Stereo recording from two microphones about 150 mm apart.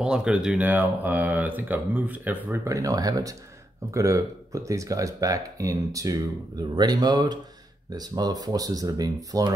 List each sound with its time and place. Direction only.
0.0 s speech: 5° right (ahead or behind); by 9.5 s 25° right (ahead or behind)